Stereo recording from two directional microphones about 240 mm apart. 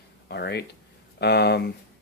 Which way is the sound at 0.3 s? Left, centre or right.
Left.